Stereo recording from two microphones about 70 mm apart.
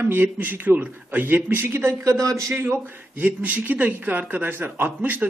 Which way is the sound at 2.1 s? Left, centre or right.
Right.